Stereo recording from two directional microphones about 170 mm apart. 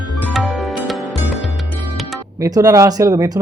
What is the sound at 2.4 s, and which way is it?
Speech, 20° right (ahead or behind).